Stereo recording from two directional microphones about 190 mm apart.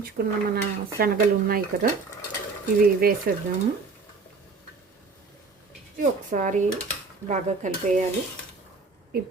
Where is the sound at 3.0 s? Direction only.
50° right (ahead or behind).